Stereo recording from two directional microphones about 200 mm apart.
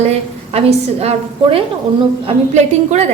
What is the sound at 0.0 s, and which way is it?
A woman's voice, 30° right (ahead or behind).